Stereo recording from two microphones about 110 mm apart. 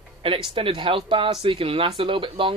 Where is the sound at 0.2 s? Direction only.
55° right (ahead or behind).